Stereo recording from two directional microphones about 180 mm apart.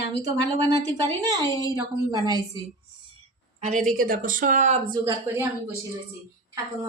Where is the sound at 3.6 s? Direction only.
45° right (ahead or behind).